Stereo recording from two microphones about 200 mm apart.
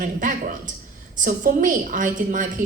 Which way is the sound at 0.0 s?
40° right (ahead or behind).